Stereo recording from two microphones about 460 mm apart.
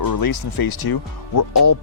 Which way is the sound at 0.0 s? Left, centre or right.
Left.